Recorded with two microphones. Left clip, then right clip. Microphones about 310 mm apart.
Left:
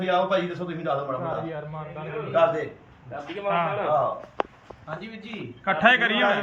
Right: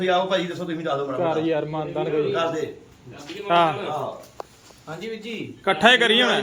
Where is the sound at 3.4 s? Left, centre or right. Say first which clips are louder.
Right 6 dB; right.